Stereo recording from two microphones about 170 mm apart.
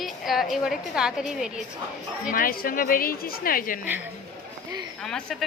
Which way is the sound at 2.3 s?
55° left (ahead or behind).